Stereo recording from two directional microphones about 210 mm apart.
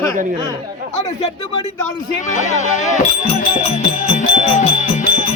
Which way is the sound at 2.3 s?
35° left (ahead or behind).